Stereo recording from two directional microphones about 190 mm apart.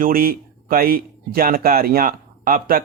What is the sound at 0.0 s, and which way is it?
Speech, 50° right (ahead or behind).